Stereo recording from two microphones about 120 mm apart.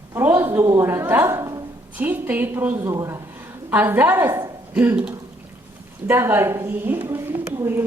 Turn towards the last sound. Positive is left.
turn(degrees=-20)  # may be behind; listen again after turning